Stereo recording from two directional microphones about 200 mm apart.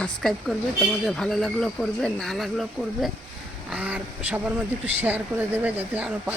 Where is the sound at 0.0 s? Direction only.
Centre (ahead or behind).